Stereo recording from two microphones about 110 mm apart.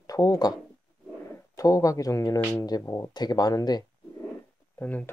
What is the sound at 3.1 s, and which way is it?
Speech, 40° left (ahead or behind).